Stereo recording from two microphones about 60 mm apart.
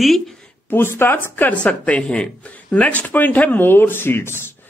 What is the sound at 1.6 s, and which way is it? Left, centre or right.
A woman's voice, left.